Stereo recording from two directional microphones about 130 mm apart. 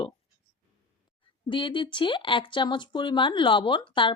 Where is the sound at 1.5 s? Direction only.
40° left (ahead or behind).